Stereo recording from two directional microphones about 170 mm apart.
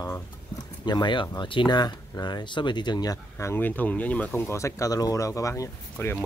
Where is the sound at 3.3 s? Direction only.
15° left (ahead or behind).